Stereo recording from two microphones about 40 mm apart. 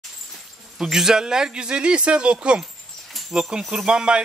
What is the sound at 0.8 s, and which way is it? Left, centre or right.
A man's voice, centre.